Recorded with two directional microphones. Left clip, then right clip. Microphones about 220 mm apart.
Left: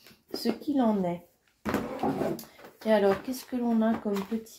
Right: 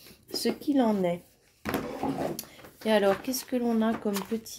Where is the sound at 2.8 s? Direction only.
40° right (ahead or behind).